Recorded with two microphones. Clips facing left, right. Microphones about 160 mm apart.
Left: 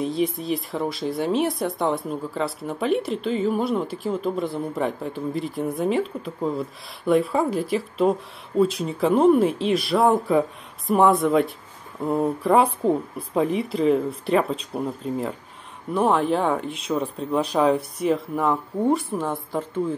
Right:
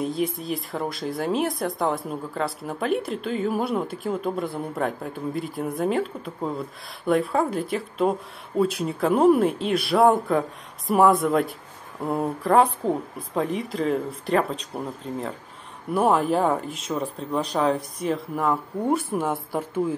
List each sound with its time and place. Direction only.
0.0 s speech: centre (ahead or behind)
15.9 s speech: 5° right (ahead or behind)